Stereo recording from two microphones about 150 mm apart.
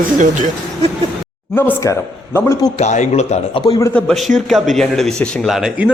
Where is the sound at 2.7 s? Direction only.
50° left (ahead or behind).